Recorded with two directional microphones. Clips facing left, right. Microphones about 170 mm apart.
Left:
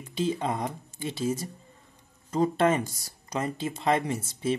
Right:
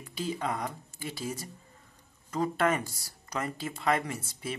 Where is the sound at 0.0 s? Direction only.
20° left (ahead or behind).